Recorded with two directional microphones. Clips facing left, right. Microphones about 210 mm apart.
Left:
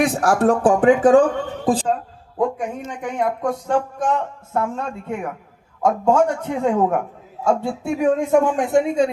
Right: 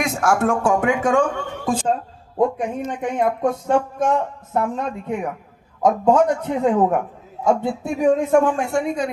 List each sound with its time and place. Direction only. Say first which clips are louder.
0.0 s speech: left 3 dB; 35° left (ahead or behind)
2.6 s a man's voice: right 3 dB; 20° right (ahead or behind)
8.3 s speech: left 1 dB; 15° left (ahead or behind)